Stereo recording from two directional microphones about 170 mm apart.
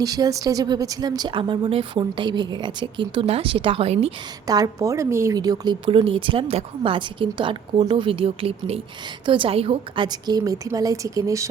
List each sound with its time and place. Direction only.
0.0 s a woman's voice: 20° right (ahead or behind); by 4.1 s 35° right (ahead or behind)
4.4 s a woman's voice: 20° right (ahead or behind)